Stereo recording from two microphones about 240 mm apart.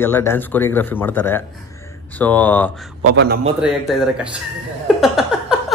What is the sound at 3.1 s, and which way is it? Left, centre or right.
Speech, right.